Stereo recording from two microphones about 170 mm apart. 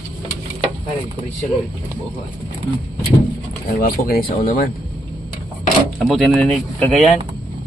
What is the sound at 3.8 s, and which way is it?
Speech, 60° left (ahead or behind).